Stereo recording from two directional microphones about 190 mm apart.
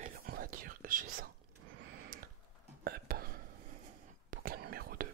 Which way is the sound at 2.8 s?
55° right (ahead or behind).